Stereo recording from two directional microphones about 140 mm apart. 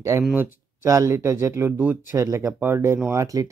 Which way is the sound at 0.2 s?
10° right (ahead or behind).